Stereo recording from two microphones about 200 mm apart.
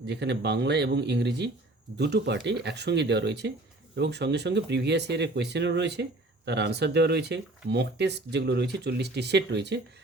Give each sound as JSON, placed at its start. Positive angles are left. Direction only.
{"t": 0.0, "sound": "speech", "side_deg": -60}